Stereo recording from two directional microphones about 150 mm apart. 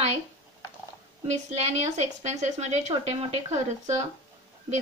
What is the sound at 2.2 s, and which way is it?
Speech, 50° right (ahead or behind).